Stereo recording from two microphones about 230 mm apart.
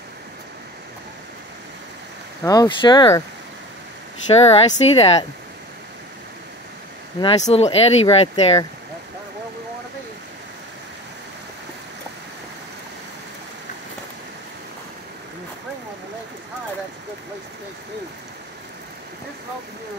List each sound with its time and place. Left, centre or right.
2.4 s speech: centre
4.3 s speech: left
7.2 s speech: left